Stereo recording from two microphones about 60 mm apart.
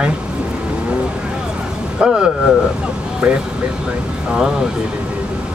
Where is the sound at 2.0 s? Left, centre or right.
Centre.